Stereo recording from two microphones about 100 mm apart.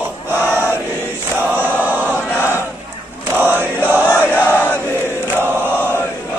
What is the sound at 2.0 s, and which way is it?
Chant, 20° right (ahead or behind).